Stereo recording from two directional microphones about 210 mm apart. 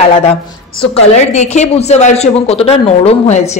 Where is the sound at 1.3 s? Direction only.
30° left (ahead or behind).